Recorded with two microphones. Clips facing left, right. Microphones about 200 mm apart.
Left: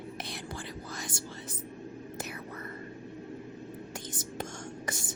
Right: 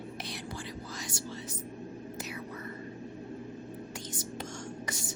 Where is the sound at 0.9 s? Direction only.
55° left (ahead or behind).